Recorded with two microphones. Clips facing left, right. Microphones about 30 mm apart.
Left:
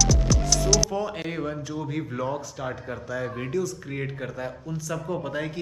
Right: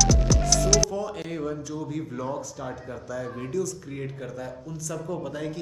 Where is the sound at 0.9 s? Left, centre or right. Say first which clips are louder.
Left 2 dB; left.